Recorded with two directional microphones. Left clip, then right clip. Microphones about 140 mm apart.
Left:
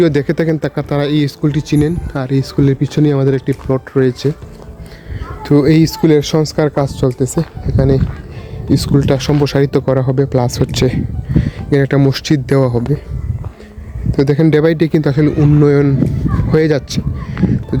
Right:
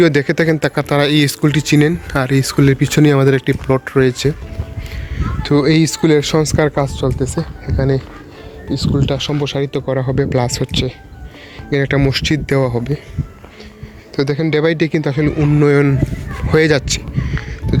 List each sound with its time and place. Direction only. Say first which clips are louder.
0.0 s speech: right 1 dB; 20° left (ahead or behind)
5.4 s speech: left 2 dB; 35° left (ahead or behind); by 6.8 s 15° left (ahead or behind)
7.2 s speech: left 3 dB; 40° left (ahead or behind)
8.7 s speech: left 5 dB; 80° left; by 9.9 s 65° left (ahead or behind)
9.9 s speech: left 3 dB; 30° left (ahead or behind)
10.7 s speech: left 4 dB; 65° left (ahead or behind)
11.7 s speech: left 2 dB; 40° left (ahead or behind)
14.1 s speech: left 4 dB; 50° left (ahead or behind)
14.6 s speech: left 3 dB; 35° left (ahead or behind)
15.6 s speech: even; 15° left (ahead or behind)